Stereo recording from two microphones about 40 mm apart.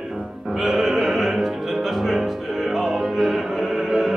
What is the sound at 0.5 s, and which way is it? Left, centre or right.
Opera, centre.